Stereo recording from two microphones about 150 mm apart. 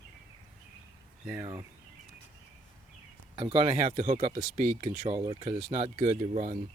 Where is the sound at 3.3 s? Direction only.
35° right (ahead or behind).